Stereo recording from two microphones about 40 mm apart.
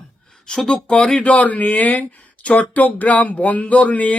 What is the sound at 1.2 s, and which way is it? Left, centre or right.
Speech, left.